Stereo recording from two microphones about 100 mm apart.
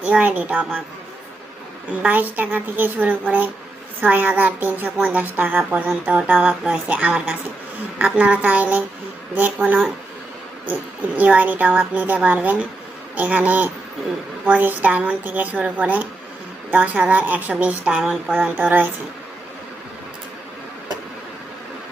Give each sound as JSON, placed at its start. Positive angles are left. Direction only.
{"t": 0.0, "sound": "a woman's voice", "side_deg": -15}
{"t": 2.0, "sound": "a woman's voice", "side_deg": -15}